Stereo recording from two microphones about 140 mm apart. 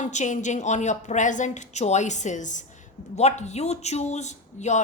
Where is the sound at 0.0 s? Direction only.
60° left (ahead or behind).